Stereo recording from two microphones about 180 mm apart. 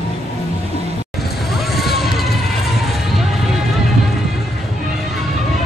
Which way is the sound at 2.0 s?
Centre (ahead or behind).